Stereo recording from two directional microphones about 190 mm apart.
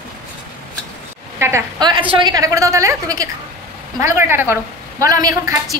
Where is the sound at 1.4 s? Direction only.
15° right (ahead or behind).